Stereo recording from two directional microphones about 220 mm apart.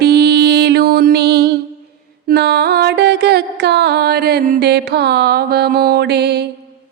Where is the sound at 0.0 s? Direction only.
45° right (ahead or behind).